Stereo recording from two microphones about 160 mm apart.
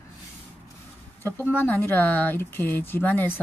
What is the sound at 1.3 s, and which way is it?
Speech, 10° left (ahead or behind).